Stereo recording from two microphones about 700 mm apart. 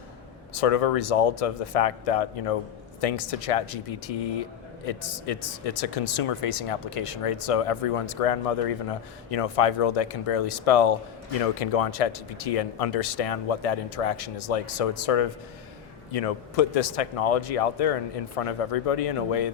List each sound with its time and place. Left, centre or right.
0.6 s speech: left